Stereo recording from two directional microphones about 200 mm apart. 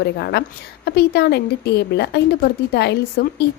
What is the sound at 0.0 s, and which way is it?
A woman's voice, 55° left (ahead or behind).